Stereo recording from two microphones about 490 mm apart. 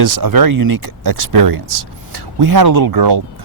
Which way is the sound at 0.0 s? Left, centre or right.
Right.